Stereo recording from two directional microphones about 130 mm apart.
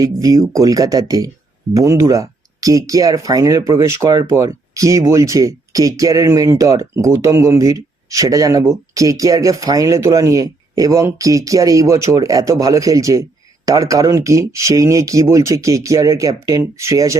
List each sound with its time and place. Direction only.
0.0 s speech: 25° right (ahead or behind)